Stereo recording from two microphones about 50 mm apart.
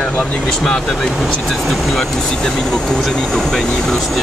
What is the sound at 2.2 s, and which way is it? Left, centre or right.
Speech, centre.